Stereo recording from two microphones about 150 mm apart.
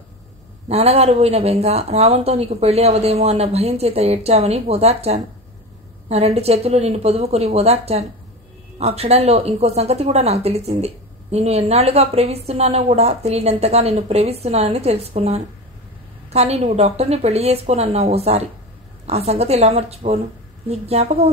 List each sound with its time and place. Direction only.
0.7 s speech: 45° right (ahead or behind)